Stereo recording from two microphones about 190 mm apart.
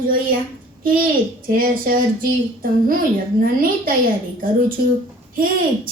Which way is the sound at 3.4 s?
50° right (ahead or behind).